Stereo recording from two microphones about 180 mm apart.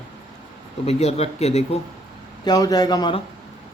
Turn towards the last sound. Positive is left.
turn(degrees=25)  # may be behind; listen again after turning